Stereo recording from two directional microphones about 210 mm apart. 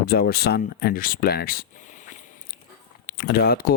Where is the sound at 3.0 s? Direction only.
50° left (ahead or behind).